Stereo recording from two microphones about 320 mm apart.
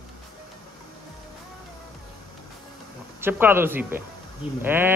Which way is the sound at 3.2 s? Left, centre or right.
Centre.